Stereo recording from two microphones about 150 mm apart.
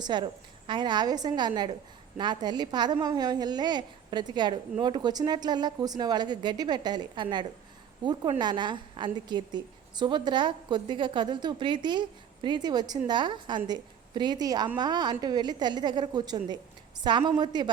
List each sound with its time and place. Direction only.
0.0 s a woman's voice: 30° right (ahead or behind)